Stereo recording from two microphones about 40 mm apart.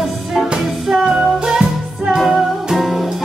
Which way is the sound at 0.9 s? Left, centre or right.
Right.